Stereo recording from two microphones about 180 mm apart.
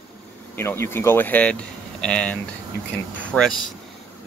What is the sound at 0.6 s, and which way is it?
Speech, 15° left (ahead or behind).